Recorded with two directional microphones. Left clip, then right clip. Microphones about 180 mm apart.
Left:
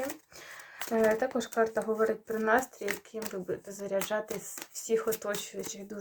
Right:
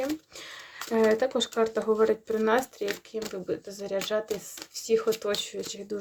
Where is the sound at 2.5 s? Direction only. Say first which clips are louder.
Left 1 dB; 60° right (ahead or behind).